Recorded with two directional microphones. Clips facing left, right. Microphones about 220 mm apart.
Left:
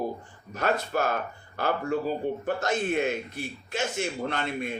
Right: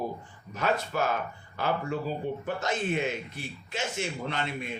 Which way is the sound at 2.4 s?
50° left (ahead or behind).